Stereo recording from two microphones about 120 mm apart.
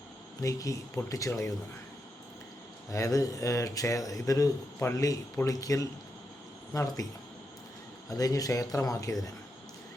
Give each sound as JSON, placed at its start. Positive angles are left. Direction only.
{"t": 0.4, "sound": "speech", "side_deg": 30}
{"t": 2.9, "sound": "speech", "side_deg": 25}
{"t": 8.1, "sound": "speech", "side_deg": 30}